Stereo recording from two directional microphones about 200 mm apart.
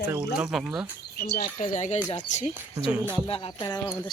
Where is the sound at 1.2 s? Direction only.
50° left (ahead or behind).